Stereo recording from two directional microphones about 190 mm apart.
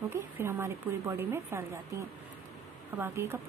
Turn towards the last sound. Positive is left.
turn(degrees=-15)  # may be behind; listen again after turning